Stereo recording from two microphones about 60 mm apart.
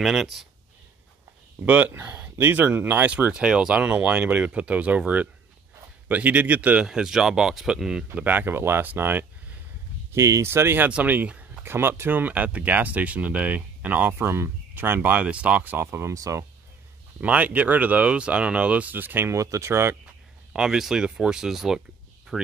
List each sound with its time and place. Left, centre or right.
0.0 s speech: centre
1.7 s speech: right
3.1 s speech: right
3.7 s speech: right
6.9 s speech: centre
8.1 s speech: right
10.1 s speech: right
10.4 s speech: right
11.1 s speech: right
11.6 s speech: right
16.1 s speech: right
17.2 s speech: right
19.2 s speech: right
20.5 s speech: centre